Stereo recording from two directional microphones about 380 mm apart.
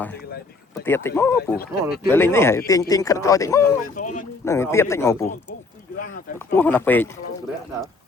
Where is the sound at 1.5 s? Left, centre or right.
Left.